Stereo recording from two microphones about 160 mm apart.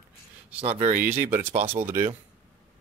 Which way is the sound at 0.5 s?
40° right (ahead or behind).